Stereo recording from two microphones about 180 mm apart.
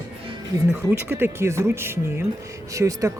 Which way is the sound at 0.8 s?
10° right (ahead or behind).